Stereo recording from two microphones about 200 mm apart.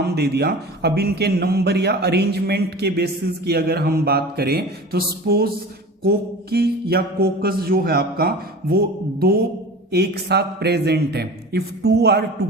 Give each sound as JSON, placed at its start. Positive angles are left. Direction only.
{"t": 0.0, "sound": "a man's voice", "side_deg": -55}
{"t": 9.9, "sound": "a man's voice", "side_deg": -55}